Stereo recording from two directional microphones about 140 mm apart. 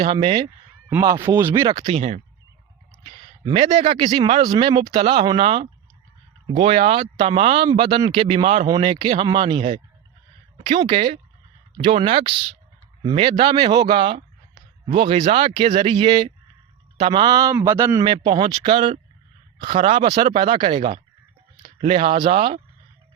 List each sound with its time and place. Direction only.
0.0 s speech: 40° right (ahead or behind)
1.0 s speech: 20° right (ahead or behind)
1.6 s speech: 35° right (ahead or behind); by 2.2 s 50° right (ahead or behind)
3.8 s a man's voice: 40° right (ahead or behind); by 18.0 s 20° right (ahead or behind)
18.0 s speech: 35° right (ahead or behind); by 20.3 s 50° right (ahead or behind)
20.3 s speech: 40° right (ahead or behind)